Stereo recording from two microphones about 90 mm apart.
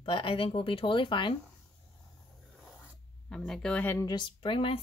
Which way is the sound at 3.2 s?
5° left (ahead or behind).